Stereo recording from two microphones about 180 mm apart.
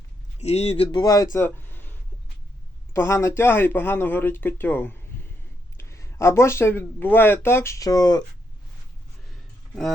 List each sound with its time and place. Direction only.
0.3 s speech: 35° left (ahead or behind)
0.9 s speech: 20° left (ahead or behind)